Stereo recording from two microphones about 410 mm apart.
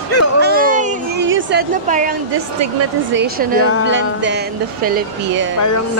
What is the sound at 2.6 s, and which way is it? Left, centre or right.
Speech, right.